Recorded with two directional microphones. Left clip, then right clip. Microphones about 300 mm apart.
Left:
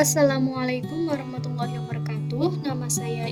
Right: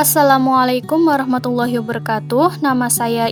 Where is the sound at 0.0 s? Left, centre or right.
Right.